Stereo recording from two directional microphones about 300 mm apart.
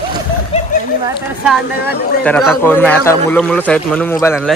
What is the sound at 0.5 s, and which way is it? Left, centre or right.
Speech, centre.